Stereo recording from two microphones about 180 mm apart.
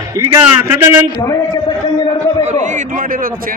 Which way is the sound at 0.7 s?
15° right (ahead or behind).